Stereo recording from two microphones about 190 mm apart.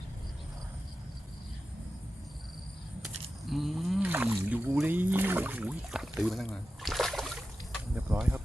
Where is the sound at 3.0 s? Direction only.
Centre (ahead or behind).